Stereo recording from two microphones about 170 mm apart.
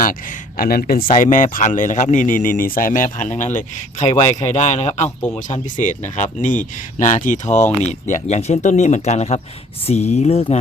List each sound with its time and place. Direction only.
0.0 s speech: 55° left (ahead or behind); by 10.6 s 35° left (ahead or behind)